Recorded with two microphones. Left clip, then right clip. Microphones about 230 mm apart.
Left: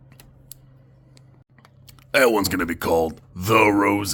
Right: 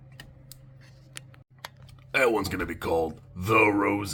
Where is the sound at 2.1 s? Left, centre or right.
Left.